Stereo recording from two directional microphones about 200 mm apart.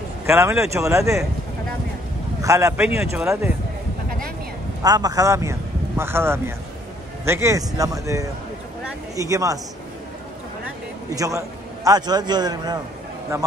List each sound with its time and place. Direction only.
0.3 s speech: 15° right (ahead or behind)
2.4 s speech: 15° right (ahead or behind)
4.8 s speech: 20° right (ahead or behind)
11.1 s a man's voice: 15° right (ahead or behind)